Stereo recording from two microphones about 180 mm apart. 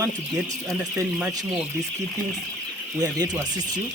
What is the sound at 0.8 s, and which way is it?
Speech, 5° right (ahead or behind).